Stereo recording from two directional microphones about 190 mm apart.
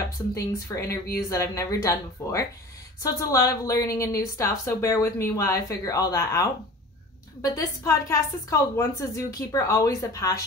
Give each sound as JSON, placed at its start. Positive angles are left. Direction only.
{"t": 0.3, "sound": "a woman's voice", "side_deg": 15}
{"t": 7.5, "sound": "a woman's voice", "side_deg": 15}